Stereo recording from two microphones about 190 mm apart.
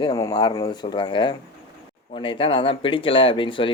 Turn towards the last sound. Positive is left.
turn(degrees=25)  # may be behind; listen again after turning